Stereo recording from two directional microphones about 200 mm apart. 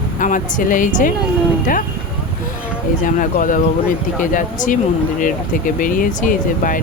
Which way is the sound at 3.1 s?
40° left (ahead or behind).